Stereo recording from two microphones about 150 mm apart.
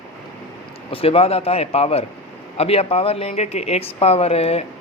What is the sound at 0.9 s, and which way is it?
Speech, 40° left (ahead or behind).